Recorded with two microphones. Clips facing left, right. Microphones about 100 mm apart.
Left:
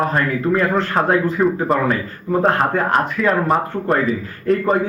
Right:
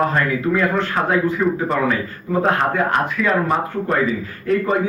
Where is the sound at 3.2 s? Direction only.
Centre (ahead or behind).